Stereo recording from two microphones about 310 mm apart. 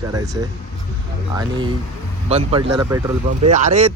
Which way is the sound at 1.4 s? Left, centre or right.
Centre.